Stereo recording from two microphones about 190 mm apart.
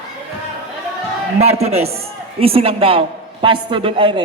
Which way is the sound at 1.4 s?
35° right (ahead or behind).